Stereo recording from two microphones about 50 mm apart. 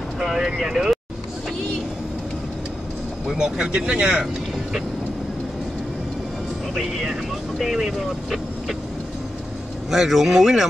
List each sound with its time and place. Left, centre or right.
0.2 s vehicle: centre
0.6 s speech: centre
3.3 s speech: centre
6.8 s speech: centre
9.8 s speech: centre